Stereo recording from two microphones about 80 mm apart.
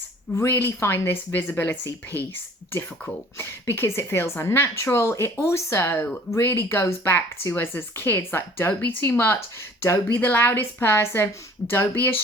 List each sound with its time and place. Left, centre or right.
0.3 s a woman's voice: left